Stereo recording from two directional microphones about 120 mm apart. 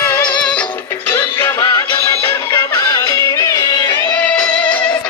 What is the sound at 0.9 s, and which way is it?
Music, 20° left (ahead or behind).